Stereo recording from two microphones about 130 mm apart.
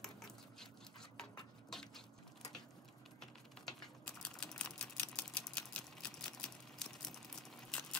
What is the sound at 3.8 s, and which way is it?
Typing, 5° left (ahead or behind).